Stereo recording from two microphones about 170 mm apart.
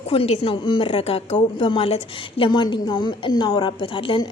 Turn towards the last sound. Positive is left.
turn(degrees=30)  # may be behind; listen again after turning